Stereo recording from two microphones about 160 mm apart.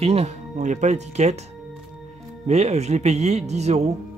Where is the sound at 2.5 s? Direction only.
45° right (ahead or behind).